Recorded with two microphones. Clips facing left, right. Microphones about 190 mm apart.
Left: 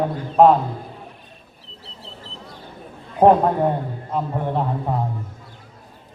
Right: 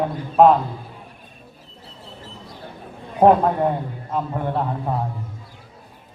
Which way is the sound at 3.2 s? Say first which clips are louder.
Left 1 dB; centre (ahead or behind).